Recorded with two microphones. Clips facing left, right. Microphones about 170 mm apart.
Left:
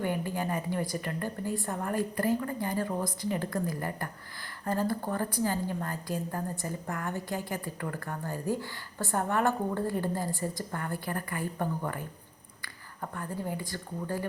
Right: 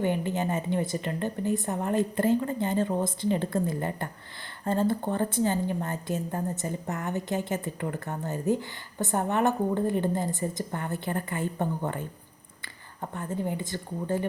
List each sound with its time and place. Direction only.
0.0 s speech: 20° right (ahead or behind)